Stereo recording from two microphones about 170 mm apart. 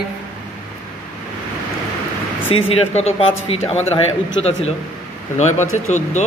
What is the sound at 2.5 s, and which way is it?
Speech, 35° left (ahead or behind).